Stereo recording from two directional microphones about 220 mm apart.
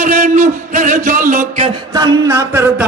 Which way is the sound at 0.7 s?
35° right (ahead or behind).